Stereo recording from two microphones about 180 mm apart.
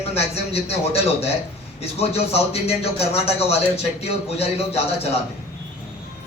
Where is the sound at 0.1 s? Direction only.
35° left (ahead or behind).